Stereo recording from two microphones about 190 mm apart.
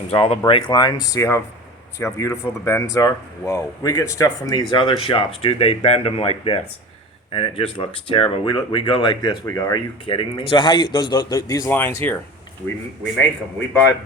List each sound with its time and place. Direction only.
0.1 s speech: 30° left (ahead or behind); by 12.1 s 10° left (ahead or behind)